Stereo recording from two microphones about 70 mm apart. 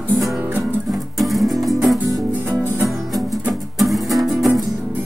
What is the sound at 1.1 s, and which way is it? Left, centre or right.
Music, centre.